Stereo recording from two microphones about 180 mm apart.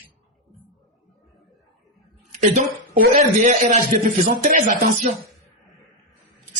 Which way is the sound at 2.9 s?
50° right (ahead or behind).